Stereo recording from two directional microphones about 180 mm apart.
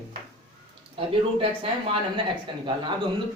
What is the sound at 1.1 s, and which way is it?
Speech, 30° right (ahead or behind).